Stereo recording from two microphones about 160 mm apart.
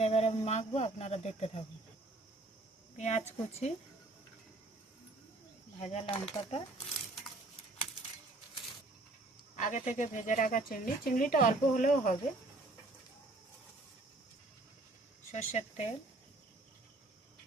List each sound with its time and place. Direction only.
0.0 s speech: 40° left (ahead or behind)
3.0 s a woman's voice: 45° left (ahead or behind)
5.8 s speech: 40° left (ahead or behind)
9.6 s speech: 50° left (ahead or behind)
15.3 s speech: 45° left (ahead or behind)